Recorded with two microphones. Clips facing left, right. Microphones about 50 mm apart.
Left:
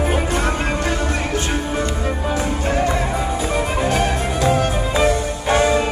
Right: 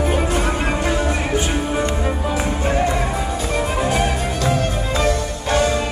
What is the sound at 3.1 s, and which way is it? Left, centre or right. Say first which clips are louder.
Music: left 1 dB; centre.